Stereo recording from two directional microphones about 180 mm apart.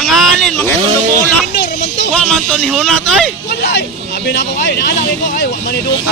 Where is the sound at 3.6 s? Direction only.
80° left.